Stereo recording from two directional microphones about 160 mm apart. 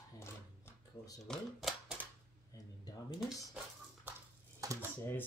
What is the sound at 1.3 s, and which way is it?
Child singing, centre (ahead or behind).